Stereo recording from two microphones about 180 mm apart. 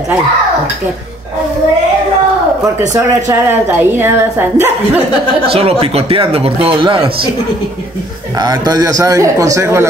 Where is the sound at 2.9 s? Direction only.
15° right (ahead or behind).